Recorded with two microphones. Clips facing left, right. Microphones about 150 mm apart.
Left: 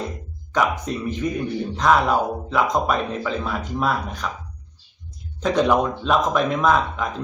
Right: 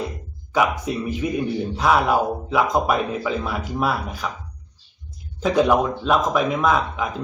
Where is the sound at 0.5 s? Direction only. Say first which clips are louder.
Right 1 dB; 5° right (ahead or behind).